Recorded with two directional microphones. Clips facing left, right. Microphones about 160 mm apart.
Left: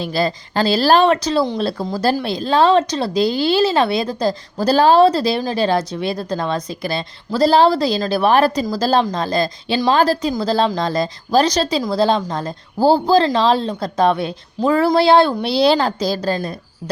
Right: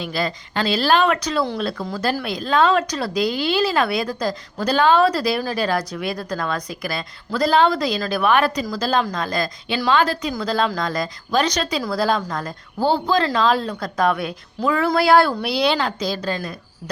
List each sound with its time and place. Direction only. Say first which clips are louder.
0.0 s a woman's voice: left 5 dB; 35° left (ahead or behind)